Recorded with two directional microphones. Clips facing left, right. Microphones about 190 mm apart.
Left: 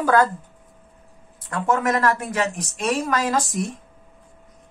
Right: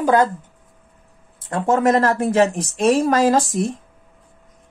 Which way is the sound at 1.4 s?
30° right (ahead or behind).